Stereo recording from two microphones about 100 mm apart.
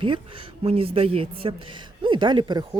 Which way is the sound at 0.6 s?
70° right (ahead or behind).